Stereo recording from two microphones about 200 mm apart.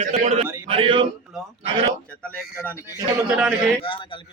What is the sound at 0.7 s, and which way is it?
Speech, 25° right (ahead or behind).